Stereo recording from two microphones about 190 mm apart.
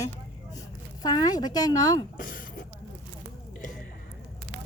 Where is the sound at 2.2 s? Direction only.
50° left (ahead or behind).